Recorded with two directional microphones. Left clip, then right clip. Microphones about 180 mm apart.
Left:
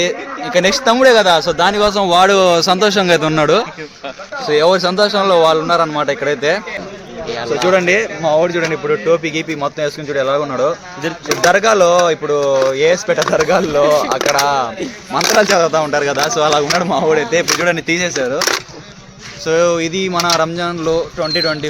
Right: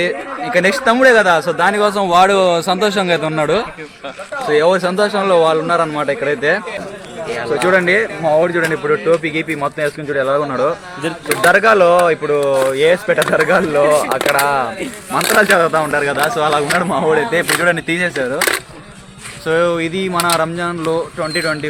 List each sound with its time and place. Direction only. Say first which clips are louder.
0.5 s a man's voice: left 1 dB; centre (ahead or behind)
2.0 s speech: left 1 dB; 30° left (ahead or behind)
4.4 s a man's voice: left 1 dB; 10° left (ahead or behind)
7.7 s speech: even; centre (ahead or behind)
18.3 s speech: right 1 dB; 45° left (ahead or behind)
19.5 s speech: left 2 dB; centre (ahead or behind)